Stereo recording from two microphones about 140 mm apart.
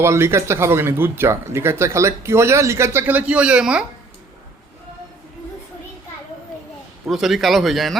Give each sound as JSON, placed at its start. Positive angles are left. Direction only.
{"t": 0.0, "sound": "speech", "side_deg": -15}
{"t": 7.1, "sound": "speech", "side_deg": 0}